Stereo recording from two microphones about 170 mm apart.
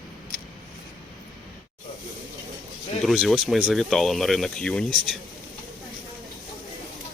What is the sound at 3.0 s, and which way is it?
Speech, centre (ahead or behind).